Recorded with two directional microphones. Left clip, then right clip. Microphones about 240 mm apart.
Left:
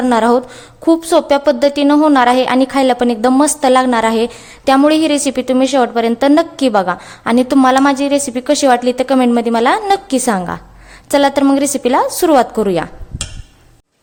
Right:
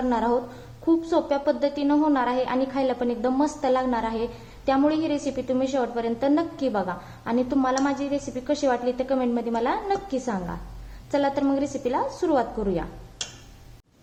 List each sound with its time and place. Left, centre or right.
0.1 s a woman's voice: left